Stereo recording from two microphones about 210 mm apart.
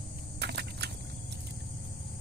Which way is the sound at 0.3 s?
50° right (ahead or behind).